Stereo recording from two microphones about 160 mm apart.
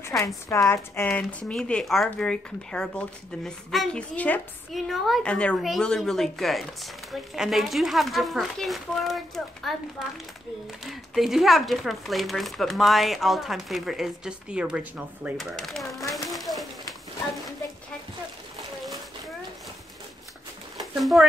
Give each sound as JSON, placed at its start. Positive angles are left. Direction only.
{"t": 0.1, "sound": "a woman's voice", "side_deg": 20}
{"t": 1.5, "sound": "speech", "side_deg": 5}
{"t": 15.5, "sound": "a sound", "side_deg": 0}
{"t": 20.8, "sound": "speech", "side_deg": 0}